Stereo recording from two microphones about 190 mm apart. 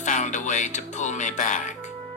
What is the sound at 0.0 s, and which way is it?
Music, 40° left (ahead or behind).